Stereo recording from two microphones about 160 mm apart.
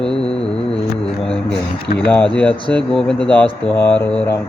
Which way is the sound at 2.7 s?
5° left (ahead or behind).